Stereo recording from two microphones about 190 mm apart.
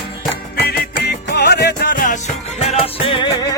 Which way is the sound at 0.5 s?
55° left (ahead or behind).